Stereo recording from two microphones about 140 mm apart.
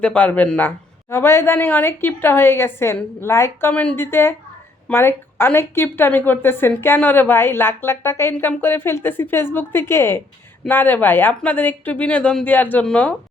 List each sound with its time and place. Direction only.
0.0 s a woman's voice: 10° left (ahead or behind)